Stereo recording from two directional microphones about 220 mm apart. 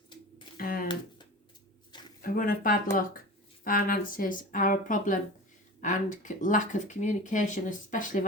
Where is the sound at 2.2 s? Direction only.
40° left (ahead or behind).